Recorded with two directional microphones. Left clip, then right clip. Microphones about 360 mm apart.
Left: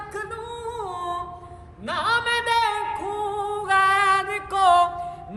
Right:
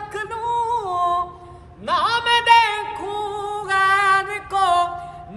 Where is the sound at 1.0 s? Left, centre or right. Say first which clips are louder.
Right 10 dB; centre.